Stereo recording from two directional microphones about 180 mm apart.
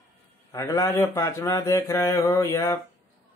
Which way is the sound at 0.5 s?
20° left (ahead or behind).